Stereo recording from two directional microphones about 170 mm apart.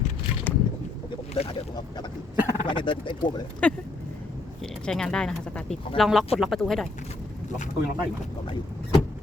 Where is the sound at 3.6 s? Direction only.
5° left (ahead or behind).